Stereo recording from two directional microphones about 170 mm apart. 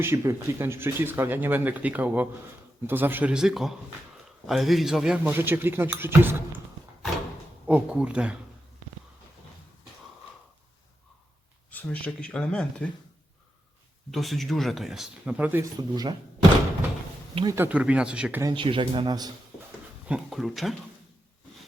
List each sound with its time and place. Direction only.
0.0 s speech: 15° right (ahead or behind)
7.7 s speech: 5° right (ahead or behind)
11.7 s speech: 10° left (ahead or behind)
14.1 s speech: centre (ahead or behind); by 16.1 s 25° right (ahead or behind)
17.5 s speech: 10° right (ahead or behind)
18.5 s speech: 30° right (ahead or behind)
20.1 s speech: 5° right (ahead or behind)